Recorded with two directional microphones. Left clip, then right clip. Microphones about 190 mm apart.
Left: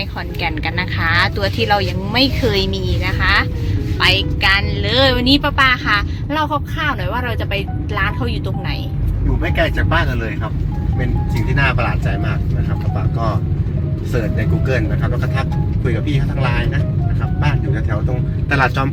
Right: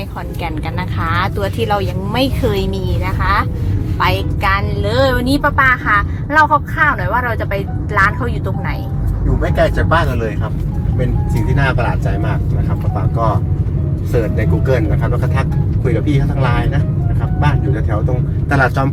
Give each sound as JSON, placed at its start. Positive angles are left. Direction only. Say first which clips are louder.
{"t": 0.4, "sound": "speech", "louder": "left 4 dB", "side_deg": 5}
{"t": 5.5, "sound": "speech", "louder": "right 2 dB", "side_deg": 20}
{"t": 9.6, "sound": "speech", "louder": "right 4 dB", "side_deg": 0}
{"t": 11.6, "sound": "speech", "louder": "even", "side_deg": 0}
{"t": 14.3, "sound": "speech", "louder": "right 4 dB", "side_deg": 0}
{"t": 18.1, "sound": "speech", "louder": "even", "side_deg": 0}